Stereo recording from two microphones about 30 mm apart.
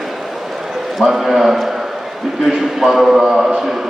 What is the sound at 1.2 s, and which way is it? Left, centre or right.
A man's voice, centre.